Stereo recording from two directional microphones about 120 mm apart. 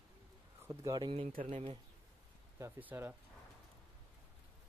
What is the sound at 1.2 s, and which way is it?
Speech, 75° right (ahead or behind).